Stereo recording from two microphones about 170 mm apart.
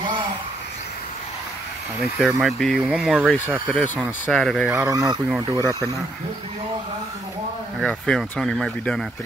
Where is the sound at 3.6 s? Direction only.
10° left (ahead or behind).